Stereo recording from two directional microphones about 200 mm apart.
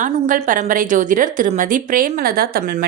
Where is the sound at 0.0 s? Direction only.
40° right (ahead or behind).